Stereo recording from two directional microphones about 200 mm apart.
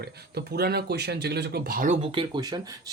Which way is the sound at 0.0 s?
55° right (ahead or behind).